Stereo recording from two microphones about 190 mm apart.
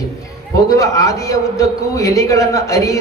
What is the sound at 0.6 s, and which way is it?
A man's voice, 15° left (ahead or behind).